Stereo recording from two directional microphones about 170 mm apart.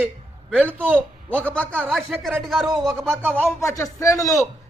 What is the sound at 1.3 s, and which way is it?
A man's voice, 10° left (ahead or behind).